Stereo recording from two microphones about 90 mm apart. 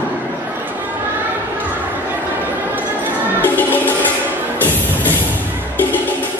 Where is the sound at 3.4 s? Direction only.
20° left (ahead or behind).